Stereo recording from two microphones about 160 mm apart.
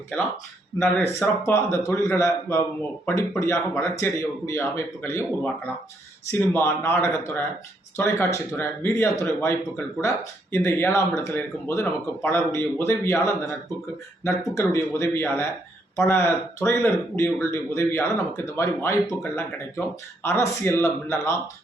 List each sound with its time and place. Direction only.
1.2 s speech: 15° left (ahead or behind)
6.5 s speech: 15° left (ahead or behind)
14.3 s speech: 20° left (ahead or behind)
19.2 s speech: 5° left (ahead or behind)
20.2 s speech: 15° left (ahead or behind)